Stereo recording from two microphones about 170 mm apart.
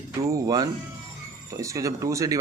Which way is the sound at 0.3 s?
20° right (ahead or behind).